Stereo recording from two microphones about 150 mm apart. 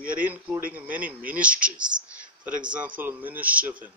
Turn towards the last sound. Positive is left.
turn(degrees=-10)  # may be behind; listen again after turning